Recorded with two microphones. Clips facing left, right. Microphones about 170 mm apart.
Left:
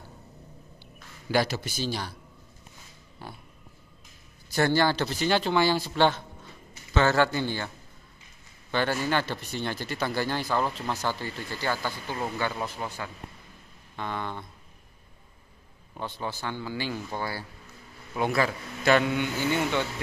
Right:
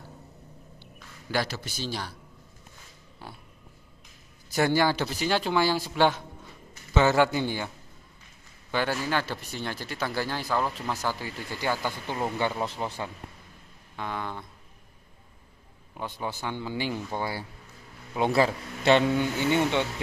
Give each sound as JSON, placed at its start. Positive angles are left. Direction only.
{"t": 0.7, "sound": "a sound", "side_deg": 5}
{"t": 1.9, "sound": "speech", "side_deg": 0}
{"t": 3.2, "sound": "speech", "side_deg": 0}
{"t": 4.6, "sound": "speech", "side_deg": -10}
{"t": 8.7, "sound": "speech", "side_deg": -5}
{"t": 13.9, "sound": "speech", "side_deg": -5}
{"t": 16.0, "sound": "a man's voice", "side_deg": -15}